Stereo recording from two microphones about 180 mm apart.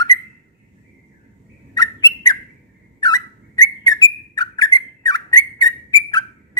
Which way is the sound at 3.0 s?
20° left (ahead or behind).